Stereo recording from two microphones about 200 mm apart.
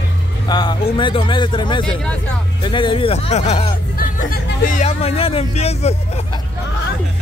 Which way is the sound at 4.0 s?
45° left (ahead or behind).